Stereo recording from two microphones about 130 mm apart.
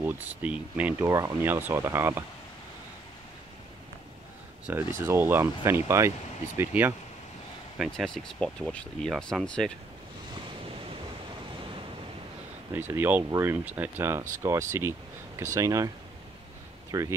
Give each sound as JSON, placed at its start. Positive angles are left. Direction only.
{"t": 0.0, "sound": "speech", "side_deg": -15}
{"t": 4.6, "sound": "speech", "side_deg": -15}
{"t": 7.9, "sound": "speech", "side_deg": 5}
{"t": 12.7, "sound": "speech", "side_deg": -15}
{"t": 16.9, "sound": "speech", "side_deg": -25}